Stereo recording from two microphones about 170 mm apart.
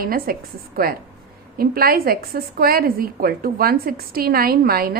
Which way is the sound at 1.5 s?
60° right (ahead or behind).